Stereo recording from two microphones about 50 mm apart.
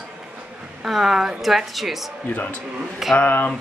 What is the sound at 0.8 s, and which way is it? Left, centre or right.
A woman's voice, centre.